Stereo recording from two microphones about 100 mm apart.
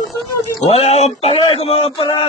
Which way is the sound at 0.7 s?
90° left.